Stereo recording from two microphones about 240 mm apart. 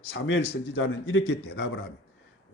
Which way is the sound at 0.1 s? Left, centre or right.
Left.